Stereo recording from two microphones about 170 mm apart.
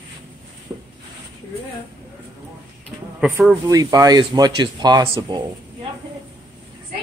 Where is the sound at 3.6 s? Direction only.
20° right (ahead or behind).